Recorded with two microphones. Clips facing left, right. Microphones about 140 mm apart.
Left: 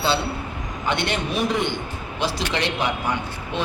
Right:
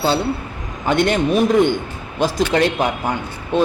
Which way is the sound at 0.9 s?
45° right (ahead or behind).